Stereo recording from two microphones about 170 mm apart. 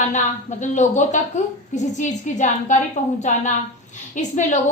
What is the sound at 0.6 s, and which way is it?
A woman's voice, 45° left (ahead or behind).